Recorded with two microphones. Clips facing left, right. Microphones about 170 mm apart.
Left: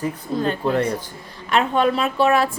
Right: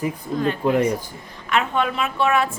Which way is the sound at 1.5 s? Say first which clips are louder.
Left 3 dB; 35° left (ahead or behind).